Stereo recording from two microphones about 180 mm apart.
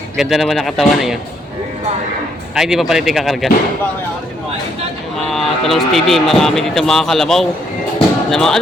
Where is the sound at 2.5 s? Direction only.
Centre (ahead or behind).